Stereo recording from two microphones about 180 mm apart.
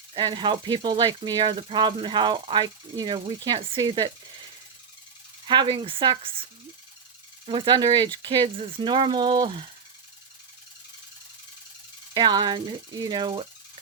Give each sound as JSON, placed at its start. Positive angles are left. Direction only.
{"t": 0.1, "sound": "speech", "side_deg": -25}
{"t": 5.5, "sound": "speech", "side_deg": -25}
{"t": 12.1, "sound": "speech", "side_deg": -25}